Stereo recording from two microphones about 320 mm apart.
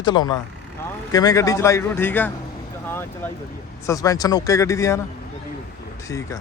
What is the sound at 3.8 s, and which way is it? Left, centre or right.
Speech, centre.